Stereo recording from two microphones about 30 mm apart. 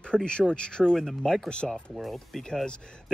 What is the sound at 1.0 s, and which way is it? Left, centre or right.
Speech, centre.